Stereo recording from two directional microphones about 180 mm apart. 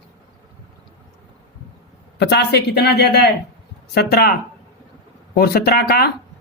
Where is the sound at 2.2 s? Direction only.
65° left (ahead or behind).